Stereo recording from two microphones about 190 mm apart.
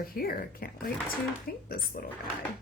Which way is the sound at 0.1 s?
50° left (ahead or behind).